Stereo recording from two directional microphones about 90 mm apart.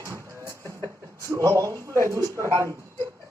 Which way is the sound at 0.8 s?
35° right (ahead or behind).